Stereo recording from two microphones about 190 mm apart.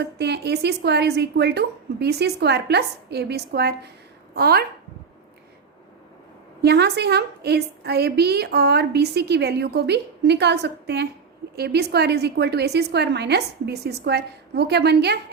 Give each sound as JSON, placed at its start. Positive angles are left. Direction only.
{"t": 0.0, "sound": "a woman's voice", "side_deg": -60}
{"t": 6.6, "sound": "a woman's voice", "side_deg": -60}